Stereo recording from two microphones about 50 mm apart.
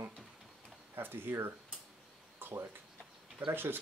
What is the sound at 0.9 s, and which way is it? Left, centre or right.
Speech, right.